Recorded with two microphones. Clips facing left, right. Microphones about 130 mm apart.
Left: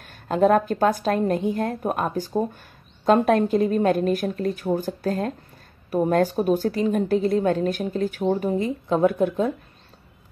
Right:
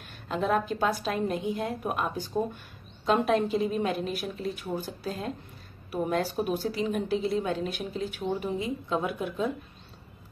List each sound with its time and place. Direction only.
0.0 s speech: 45° left (ahead or behind)